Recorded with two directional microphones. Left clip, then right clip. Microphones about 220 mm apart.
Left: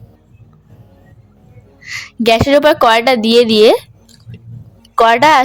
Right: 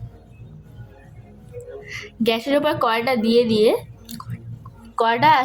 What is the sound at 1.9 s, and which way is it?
A woman's voice, 40° left (ahead or behind).